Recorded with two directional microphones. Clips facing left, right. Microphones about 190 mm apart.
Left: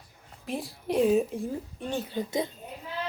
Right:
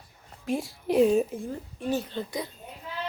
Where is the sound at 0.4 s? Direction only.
Centre (ahead or behind).